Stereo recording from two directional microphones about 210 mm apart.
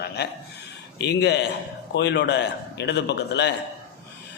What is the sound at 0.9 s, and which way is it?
A man's voice, 55° left (ahead or behind).